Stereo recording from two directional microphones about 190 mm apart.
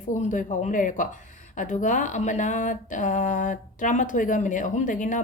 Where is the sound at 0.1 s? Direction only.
40° left (ahead or behind).